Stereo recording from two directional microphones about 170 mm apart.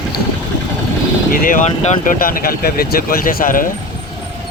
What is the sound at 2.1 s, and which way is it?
Speech, 55° left (ahead or behind).